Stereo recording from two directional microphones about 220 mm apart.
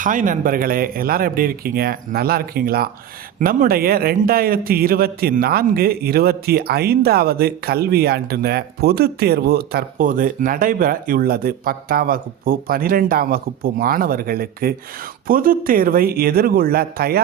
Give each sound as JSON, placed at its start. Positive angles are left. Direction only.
{"t": 0.0, "sound": "a man's voice", "side_deg": -35}